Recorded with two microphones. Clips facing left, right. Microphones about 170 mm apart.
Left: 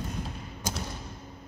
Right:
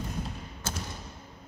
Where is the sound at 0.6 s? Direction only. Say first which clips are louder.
Left 2 dB; 15° left (ahead or behind).